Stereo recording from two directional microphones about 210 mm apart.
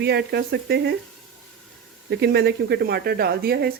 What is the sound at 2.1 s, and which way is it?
Speech, 50° right (ahead or behind).